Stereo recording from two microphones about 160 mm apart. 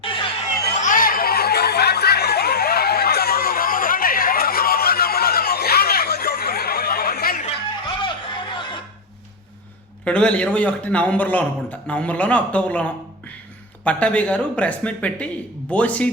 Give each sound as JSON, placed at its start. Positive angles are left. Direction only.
{"t": 0.0, "sound": "a sound", "side_deg": 35}
{"t": 0.8, "sound": "snicker", "side_deg": 55}
{"t": 7.9, "sound": "music", "side_deg": 30}
{"t": 10.0, "sound": "a man's voice", "side_deg": 5}